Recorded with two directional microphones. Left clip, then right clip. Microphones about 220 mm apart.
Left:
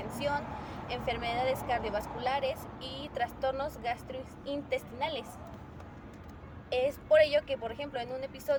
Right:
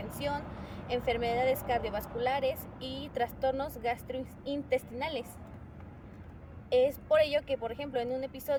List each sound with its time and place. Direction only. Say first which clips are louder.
0.2 s speech: left 2 dB; 20° right (ahead or behind)
6.7 s speech: right 1 dB; 20° right (ahead or behind)